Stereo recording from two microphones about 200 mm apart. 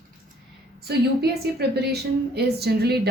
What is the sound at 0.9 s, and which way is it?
A woman's voice, 55° right (ahead or behind).